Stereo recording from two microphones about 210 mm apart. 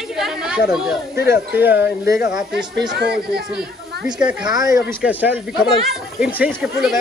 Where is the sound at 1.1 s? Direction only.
50° left (ahead or behind).